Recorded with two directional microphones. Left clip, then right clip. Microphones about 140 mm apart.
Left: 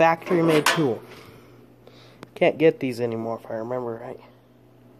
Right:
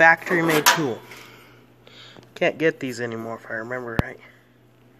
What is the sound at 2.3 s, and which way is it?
Speech, 20° left (ahead or behind).